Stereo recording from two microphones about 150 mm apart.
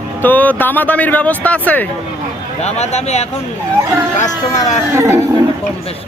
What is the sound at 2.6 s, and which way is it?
Speech, 45° left (ahead or behind).